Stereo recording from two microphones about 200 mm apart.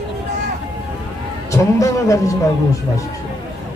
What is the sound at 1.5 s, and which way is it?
Speech, 15° left (ahead or behind).